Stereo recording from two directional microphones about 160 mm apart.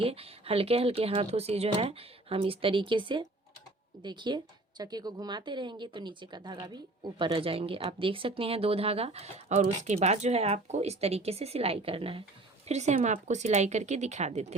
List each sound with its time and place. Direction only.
0.0 s speech: 40° right (ahead or behind)